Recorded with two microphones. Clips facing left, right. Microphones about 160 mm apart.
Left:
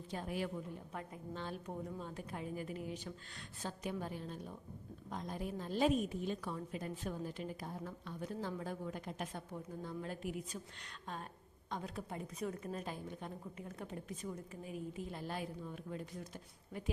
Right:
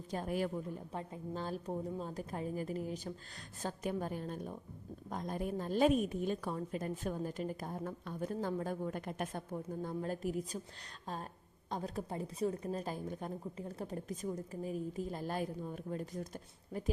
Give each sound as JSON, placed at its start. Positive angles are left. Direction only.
{"t": 0.1, "sound": "a woman's voice", "side_deg": -45}